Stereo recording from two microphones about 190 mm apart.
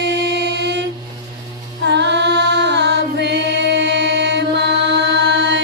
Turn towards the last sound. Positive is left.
turn(degrees=-65)  # may be behind; listen again after turning